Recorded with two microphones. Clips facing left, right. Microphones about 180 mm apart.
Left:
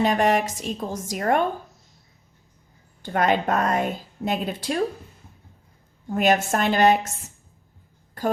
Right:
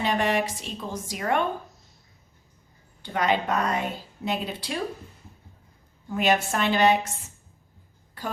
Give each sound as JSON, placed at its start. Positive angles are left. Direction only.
{"t": 0.0, "sound": "a woman's voice", "side_deg": 45}
{"t": 3.0, "sound": "a woman's voice", "side_deg": 50}
{"t": 6.1, "sound": "a woman's voice", "side_deg": 45}
{"t": 8.2, "sound": "a sound", "side_deg": 45}